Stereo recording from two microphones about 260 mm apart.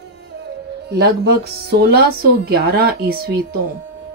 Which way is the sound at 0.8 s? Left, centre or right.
Right.